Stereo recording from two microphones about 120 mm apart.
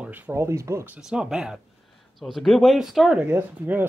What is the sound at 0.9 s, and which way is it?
Speech, 5° right (ahead or behind).